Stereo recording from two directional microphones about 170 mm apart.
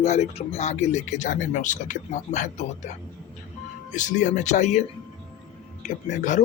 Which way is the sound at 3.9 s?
45° left (ahead or behind).